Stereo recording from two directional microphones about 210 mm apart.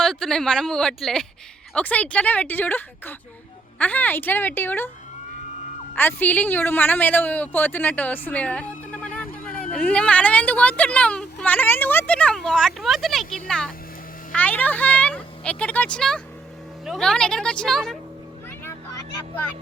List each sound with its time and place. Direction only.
0.0 s speech: 5° left (ahead or behind)
5.9 s speech: 10° left (ahead or behind)